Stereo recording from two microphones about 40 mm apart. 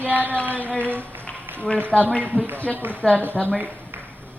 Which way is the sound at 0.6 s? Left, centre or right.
Left.